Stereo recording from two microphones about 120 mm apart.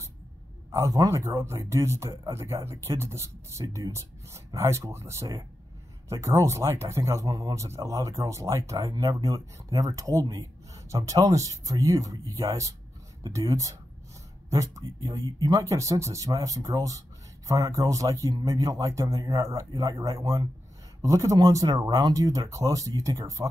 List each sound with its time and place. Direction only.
0.7 s speech: 25° right (ahead or behind)
15.6 s speech: 25° right (ahead or behind)